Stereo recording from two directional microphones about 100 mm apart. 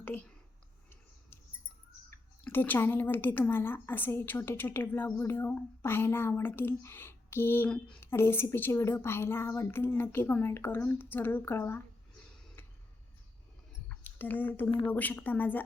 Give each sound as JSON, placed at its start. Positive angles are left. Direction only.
{"t": 0.0, "sound": "speech", "side_deg": 20}
{"t": 2.4, "sound": "a woman's voice", "side_deg": 20}
{"t": 13.8, "sound": "a sound", "side_deg": 15}
{"t": 14.8, "sound": "a woman's voice", "side_deg": 15}